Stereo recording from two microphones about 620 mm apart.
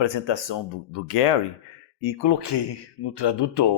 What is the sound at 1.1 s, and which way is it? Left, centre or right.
Speech, left.